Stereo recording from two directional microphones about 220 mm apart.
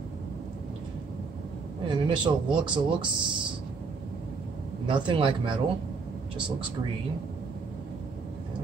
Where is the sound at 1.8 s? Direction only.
20° right (ahead or behind).